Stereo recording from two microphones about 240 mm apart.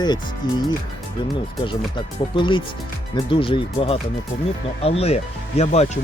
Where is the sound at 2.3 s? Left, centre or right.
Centre.